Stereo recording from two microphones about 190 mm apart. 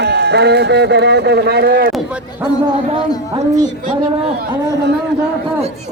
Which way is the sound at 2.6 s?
30° right (ahead or behind).